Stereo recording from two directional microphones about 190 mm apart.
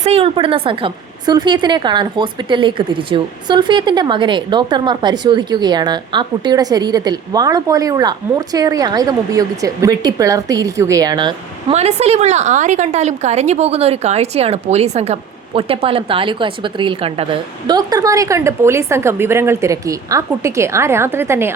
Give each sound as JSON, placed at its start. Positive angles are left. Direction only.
{"t": 0.0, "sound": "a woman's voice", "side_deg": -30}